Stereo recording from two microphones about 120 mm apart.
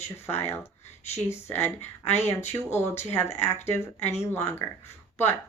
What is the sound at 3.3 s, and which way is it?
Speech, 20° left (ahead or behind).